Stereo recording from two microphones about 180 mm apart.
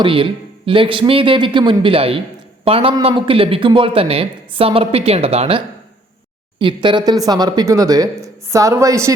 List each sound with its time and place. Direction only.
0.0 s a man's voice: 30° right (ahead or behind)